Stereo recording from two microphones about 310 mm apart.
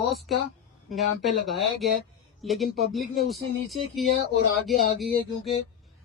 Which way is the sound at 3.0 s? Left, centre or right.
Left.